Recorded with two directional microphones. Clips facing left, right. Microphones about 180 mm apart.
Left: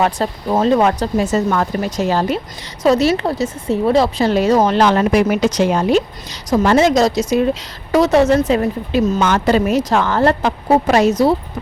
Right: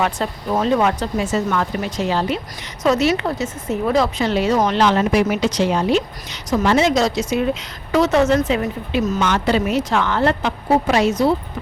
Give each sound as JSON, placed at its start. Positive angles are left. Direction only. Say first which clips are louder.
{"t": 0.0, "sound": "speech", "louder": "left 4 dB", "side_deg": 35}
{"t": 4.3, "sound": "a woman's voice", "louder": "left 4 dB", "side_deg": 45}
{"t": 4.5, "sound": "speech", "louder": "left 4 dB", "side_deg": 30}
{"t": 4.8, "sound": "a woman's voice", "louder": "left 3 dB", "side_deg": 50}
{"t": 9.2, "sound": "speech", "louder": "left 4 dB", "side_deg": 45}